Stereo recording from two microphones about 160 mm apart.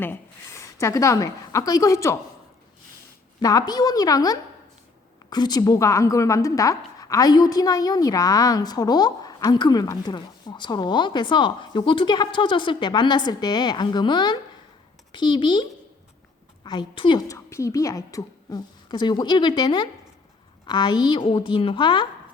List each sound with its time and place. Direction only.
0.0 s a woman's voice: 15° left (ahead or behind)
3.4 s a woman's voice: 25° left (ahead or behind)
16.6 s a woman's voice: 30° left (ahead or behind)